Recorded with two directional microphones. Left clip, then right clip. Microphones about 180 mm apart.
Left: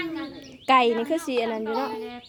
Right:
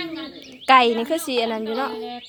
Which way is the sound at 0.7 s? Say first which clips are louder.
Right 4 dB; 15° left (ahead or behind).